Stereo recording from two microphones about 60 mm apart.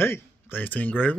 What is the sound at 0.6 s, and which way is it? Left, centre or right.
Speech, left.